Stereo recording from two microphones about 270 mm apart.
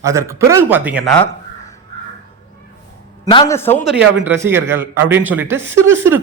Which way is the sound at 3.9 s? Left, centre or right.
Centre.